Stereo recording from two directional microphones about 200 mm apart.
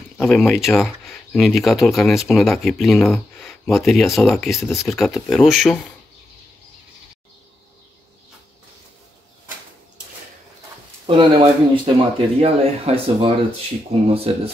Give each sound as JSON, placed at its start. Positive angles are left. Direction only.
{"t": 0.2, "sound": "speech", "side_deg": 0}
{"t": 11.1, "sound": "speech", "side_deg": -25}